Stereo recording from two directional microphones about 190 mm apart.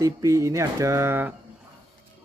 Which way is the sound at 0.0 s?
15° right (ahead or behind).